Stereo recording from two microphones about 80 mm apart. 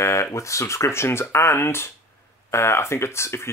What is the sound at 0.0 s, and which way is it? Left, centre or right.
Speech, left.